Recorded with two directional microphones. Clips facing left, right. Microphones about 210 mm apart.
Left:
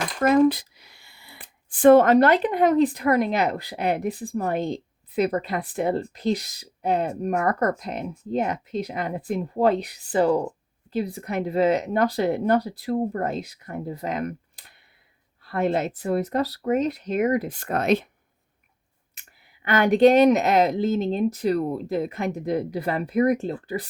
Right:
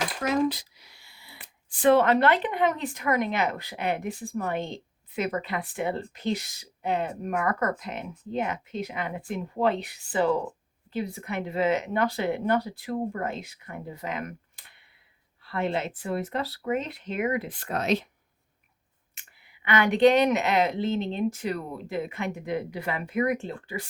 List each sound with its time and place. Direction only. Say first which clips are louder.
0.2 s speech: left 9 dB; 55° left (ahead or behind)
19.6 s speech: left 4 dB; 40° left (ahead or behind)